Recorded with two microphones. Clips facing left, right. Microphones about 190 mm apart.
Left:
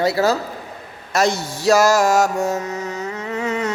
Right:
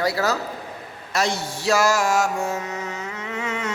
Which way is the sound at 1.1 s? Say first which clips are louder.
Left 5 dB; 45° left (ahead or behind).